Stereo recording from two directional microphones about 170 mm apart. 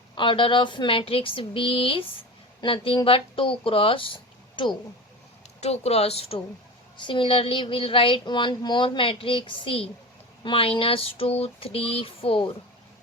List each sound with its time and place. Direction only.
0.2 s speech: 30° left (ahead or behind)